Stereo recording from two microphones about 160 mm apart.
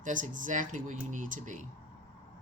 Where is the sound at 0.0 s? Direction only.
55° right (ahead or behind).